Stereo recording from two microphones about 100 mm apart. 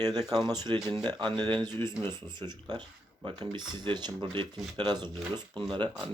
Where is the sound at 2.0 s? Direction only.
20° left (ahead or behind).